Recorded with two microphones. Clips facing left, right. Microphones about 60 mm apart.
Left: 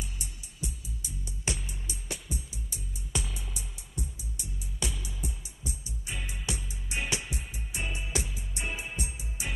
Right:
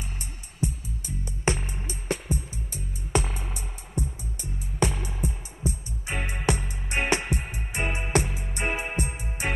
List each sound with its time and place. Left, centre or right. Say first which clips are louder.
0.2 s music: right 10 dB; right